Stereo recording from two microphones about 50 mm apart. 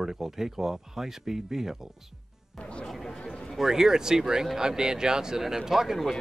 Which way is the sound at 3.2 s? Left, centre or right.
Left.